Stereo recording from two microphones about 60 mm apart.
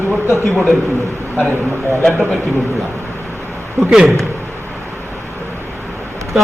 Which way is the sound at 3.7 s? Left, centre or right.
Centre.